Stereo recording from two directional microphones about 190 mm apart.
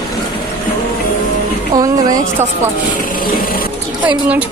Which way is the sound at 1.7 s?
20° right (ahead or behind).